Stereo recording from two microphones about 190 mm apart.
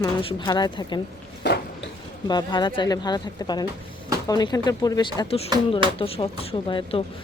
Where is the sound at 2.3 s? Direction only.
25° left (ahead or behind).